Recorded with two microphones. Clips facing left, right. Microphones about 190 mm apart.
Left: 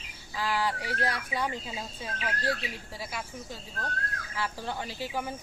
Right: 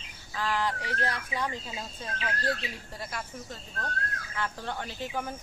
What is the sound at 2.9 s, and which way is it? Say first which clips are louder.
A woman's voice: even; 5° left (ahead or behind).